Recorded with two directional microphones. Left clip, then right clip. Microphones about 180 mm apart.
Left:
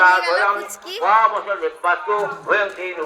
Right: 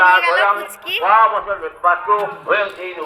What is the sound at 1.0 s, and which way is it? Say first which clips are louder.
A man's voice: right 2 dB; 15° right (ahead or behind).